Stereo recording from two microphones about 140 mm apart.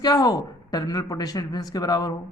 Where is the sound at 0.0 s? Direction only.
25° left (ahead or behind).